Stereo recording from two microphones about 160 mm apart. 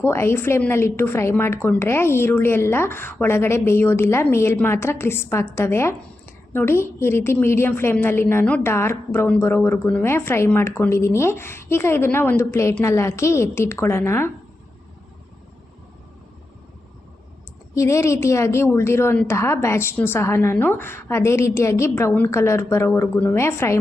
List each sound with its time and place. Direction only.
0.0 s a woman's voice: 15° left (ahead or behind)
17.7 s a woman's voice: 20° left (ahead or behind)